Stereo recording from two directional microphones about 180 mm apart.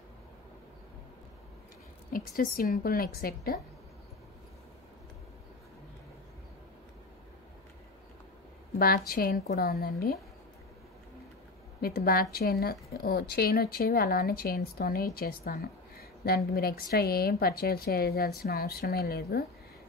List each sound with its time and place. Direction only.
2.1 s a woman's voice: 50° left (ahead or behind)
8.7 s a woman's voice: 55° left (ahead or behind)
11.8 s a woman's voice: 55° left (ahead or behind)